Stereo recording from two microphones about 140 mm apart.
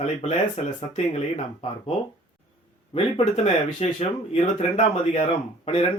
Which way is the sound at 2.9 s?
45° left (ahead or behind).